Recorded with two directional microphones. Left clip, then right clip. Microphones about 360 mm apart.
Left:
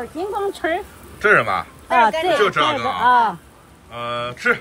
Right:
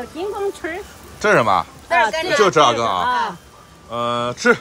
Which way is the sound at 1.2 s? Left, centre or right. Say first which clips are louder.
Right 1 dB; centre.